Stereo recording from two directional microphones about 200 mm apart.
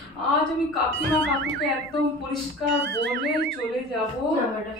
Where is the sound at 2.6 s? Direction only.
60° right (ahead or behind).